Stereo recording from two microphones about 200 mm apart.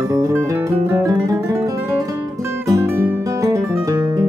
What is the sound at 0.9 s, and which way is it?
Guitar, 15° right (ahead or behind).